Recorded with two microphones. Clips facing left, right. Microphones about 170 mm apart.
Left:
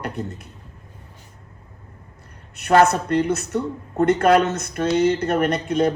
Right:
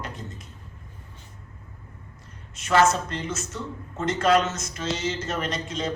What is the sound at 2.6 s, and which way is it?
A man's voice, 60° left (ahead or behind).